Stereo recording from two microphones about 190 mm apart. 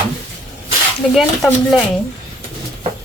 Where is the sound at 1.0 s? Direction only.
Centre (ahead or behind).